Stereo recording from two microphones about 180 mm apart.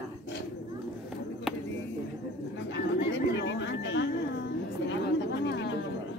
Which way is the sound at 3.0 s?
75° left (ahead or behind).